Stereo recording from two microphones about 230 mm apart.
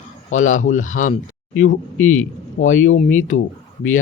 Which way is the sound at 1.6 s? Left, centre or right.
Left.